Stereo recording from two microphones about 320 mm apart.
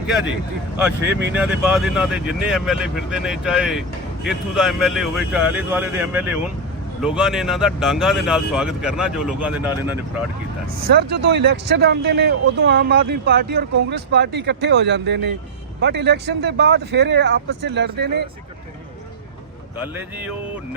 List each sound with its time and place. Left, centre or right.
1.2 s speech: centre
11.1 s speech: right